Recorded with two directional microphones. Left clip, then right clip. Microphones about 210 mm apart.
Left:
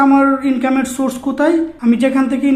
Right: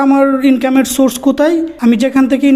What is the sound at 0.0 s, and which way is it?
Speech, 30° right (ahead or behind).